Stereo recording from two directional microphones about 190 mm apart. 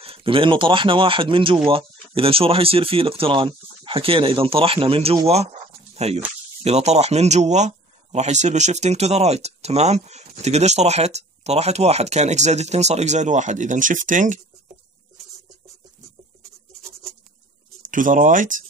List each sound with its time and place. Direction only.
0.0 s speech: 30° right (ahead or behind)
17.8 s speech: 45° right (ahead or behind)